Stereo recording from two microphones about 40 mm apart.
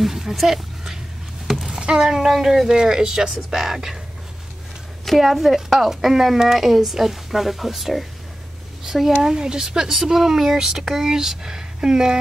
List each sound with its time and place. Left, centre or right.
0.0 s music: centre
1.5 s a sound: centre
1.8 s a sound: centre
2.4 s speech: centre
2.7 s speech: centre
5.0 s speech: centre